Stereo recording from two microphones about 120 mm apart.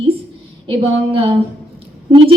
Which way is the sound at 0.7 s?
50° right (ahead or behind).